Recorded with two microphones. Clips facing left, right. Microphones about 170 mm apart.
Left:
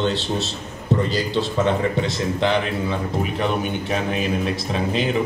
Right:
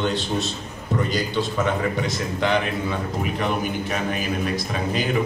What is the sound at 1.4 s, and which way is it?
A man's voice, 30° left (ahead or behind).